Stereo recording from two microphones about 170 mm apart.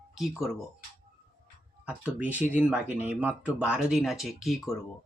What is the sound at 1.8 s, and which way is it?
Speech, 10° right (ahead or behind).